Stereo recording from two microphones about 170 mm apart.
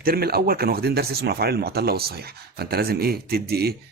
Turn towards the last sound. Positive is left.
turn(degrees=-65)  # may be behind; listen again after turning